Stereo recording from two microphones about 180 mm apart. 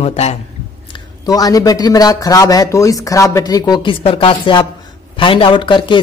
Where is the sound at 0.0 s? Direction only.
35° left (ahead or behind).